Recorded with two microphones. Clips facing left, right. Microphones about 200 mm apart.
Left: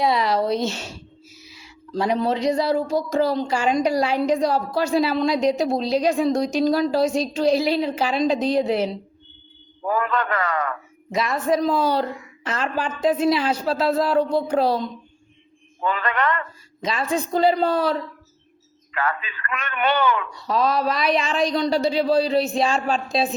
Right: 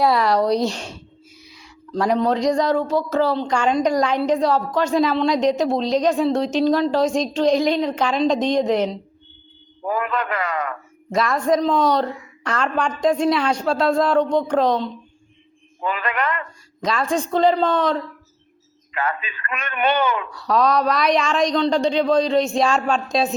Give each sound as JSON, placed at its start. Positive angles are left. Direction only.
{"t": 0.0, "sound": "speech", "side_deg": 0}
{"t": 0.9, "sound": "a sound", "side_deg": 5}
{"t": 2.2, "sound": "a woman's voice", "side_deg": 5}
{"t": 9.8, "sound": "a man's voice", "side_deg": -15}
{"t": 11.1, "sound": "speech", "side_deg": 0}
{"t": 15.8, "sound": "a man's voice", "side_deg": -10}
{"t": 16.8, "sound": "a woman's voice", "side_deg": 0}
{"t": 18.9, "sound": "a man's voice", "side_deg": -20}
{"t": 20.3, "sound": "speech", "side_deg": 0}